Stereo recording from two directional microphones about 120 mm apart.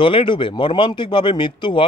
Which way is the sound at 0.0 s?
45° left (ahead or behind).